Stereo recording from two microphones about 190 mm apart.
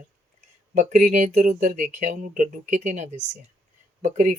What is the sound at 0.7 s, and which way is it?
Speech, 40° right (ahead or behind).